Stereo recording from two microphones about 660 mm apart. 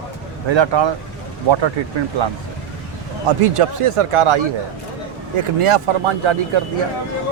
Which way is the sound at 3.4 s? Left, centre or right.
Right.